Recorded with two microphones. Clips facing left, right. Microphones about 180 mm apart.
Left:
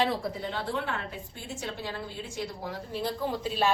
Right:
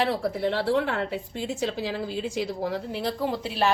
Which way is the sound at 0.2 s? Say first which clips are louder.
Right 7 dB; 70° right (ahead or behind).